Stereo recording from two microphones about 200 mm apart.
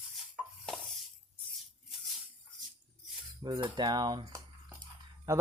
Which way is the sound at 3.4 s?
25° right (ahead or behind).